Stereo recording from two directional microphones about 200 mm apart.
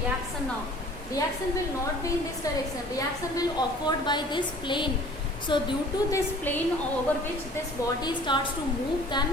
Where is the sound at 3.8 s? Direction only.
20° left (ahead or behind).